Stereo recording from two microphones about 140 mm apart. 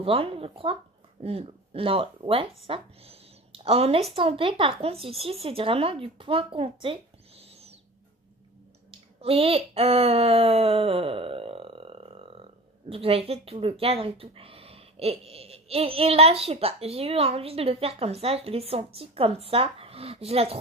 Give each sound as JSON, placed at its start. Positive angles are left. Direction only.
{"t": 0.0, "sound": "speech", "side_deg": -45}
{"t": 8.9, "sound": "speech", "side_deg": -45}